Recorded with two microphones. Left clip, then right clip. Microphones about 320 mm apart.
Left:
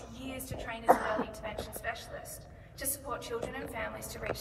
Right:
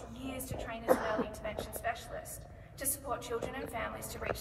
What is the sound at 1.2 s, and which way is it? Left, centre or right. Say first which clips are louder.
Speech: even; centre.